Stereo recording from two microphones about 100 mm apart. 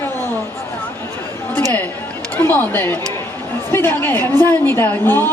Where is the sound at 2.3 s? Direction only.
20° left (ahead or behind).